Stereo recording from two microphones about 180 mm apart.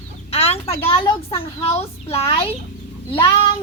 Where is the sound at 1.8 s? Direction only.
35° left (ahead or behind).